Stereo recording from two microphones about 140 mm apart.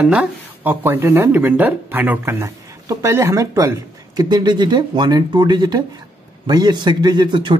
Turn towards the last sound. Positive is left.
turn(degrees=-35)  # may be behind; listen again after turning